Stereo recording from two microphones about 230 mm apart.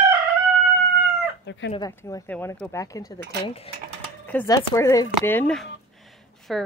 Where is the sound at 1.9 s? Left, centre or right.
Centre.